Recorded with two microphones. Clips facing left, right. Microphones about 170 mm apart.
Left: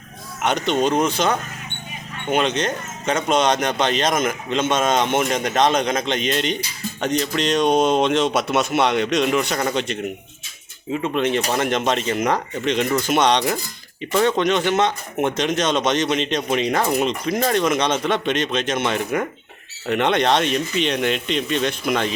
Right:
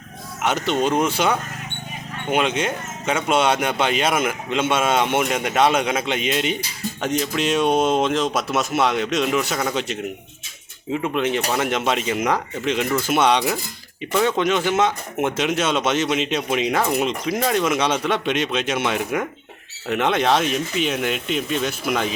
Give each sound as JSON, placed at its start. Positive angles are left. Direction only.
{"t": 0.4, "sound": "speech", "side_deg": -5}